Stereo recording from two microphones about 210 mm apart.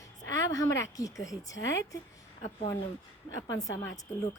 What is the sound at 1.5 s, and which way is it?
Speech, 60° left (ahead or behind).